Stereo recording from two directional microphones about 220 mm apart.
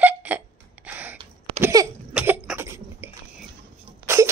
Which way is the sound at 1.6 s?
15° right (ahead or behind).